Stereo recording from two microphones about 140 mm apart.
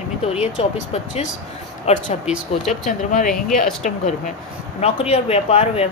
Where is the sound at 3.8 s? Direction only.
60° left (ahead or behind).